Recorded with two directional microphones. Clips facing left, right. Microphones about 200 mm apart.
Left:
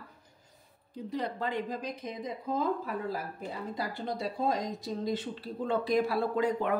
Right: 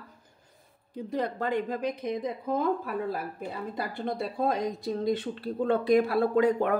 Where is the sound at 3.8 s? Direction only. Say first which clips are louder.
Right 4 dB; 55° right (ahead or behind).